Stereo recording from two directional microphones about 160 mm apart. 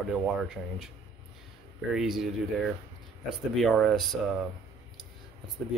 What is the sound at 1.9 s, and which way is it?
Speech, 5° right (ahead or behind).